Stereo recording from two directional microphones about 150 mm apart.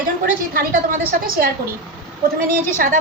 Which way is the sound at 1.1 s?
70° right (ahead or behind).